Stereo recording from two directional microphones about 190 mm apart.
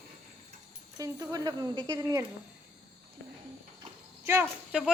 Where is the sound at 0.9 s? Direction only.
15° right (ahead or behind).